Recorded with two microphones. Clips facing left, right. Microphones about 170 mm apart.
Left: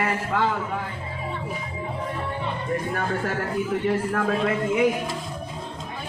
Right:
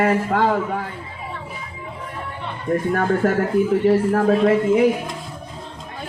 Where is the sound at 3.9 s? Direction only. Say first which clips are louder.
Right 7 dB; 35° right (ahead or behind).